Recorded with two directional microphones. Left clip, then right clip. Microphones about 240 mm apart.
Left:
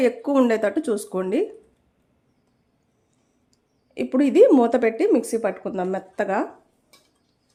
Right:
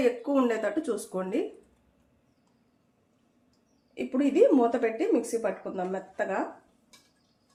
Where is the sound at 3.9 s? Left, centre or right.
Left.